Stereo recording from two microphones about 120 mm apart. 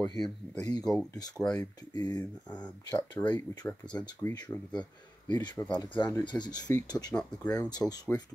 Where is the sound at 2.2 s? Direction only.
10° left (ahead or behind).